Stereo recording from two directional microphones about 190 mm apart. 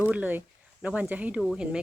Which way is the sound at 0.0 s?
10° right (ahead or behind).